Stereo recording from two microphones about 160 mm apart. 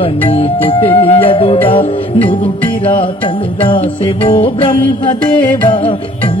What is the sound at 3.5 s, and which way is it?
Music, 35° left (ahead or behind).